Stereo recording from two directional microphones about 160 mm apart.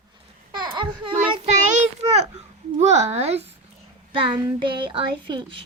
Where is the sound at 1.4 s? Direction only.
50° right (ahead or behind).